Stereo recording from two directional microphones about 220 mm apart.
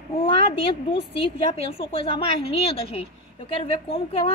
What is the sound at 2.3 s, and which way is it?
A woman's voice, 25° left (ahead or behind).